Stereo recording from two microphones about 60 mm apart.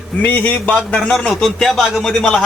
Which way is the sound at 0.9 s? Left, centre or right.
Centre.